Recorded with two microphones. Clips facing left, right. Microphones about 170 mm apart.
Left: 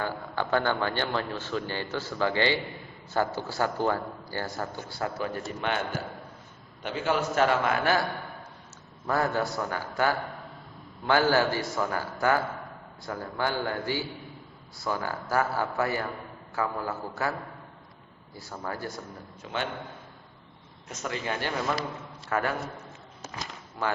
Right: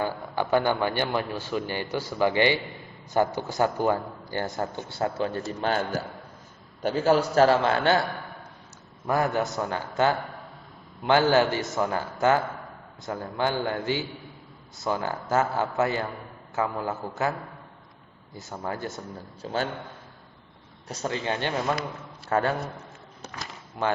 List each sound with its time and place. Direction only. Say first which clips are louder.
0.0 s a man's voice: right 3 dB; 15° right (ahead or behind); by 5.8 s 35° right (ahead or behind)
6.8 s a man's voice: right 6 dB; 40° right (ahead or behind)
9.0 s a man's voice: right 2 dB; 15° right (ahead or behind)
13.1 s a man's voice: right 3 dB; 20° right (ahead or behind)
18.3 s a man's voice: right 3 dB; 20° right (ahead or behind)
19.4 s a man's voice: right 4 dB; 35° right (ahead or behind)
20.8 s a man's voice: right 4 dB; 30° right (ahead or behind)
23.8 s a man's voice: right 3 dB; 20° right (ahead or behind)